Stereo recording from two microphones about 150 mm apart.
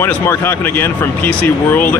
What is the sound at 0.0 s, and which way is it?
Speech, 15° left (ahead or behind).